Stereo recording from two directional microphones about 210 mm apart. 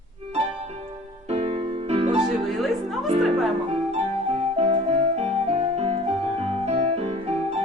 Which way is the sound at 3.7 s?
30° right (ahead or behind).